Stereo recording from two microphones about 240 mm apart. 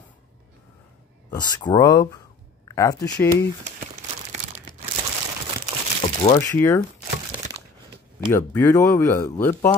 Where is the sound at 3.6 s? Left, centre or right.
Right.